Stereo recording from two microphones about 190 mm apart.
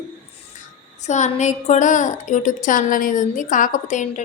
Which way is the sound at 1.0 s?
40° left (ahead or behind).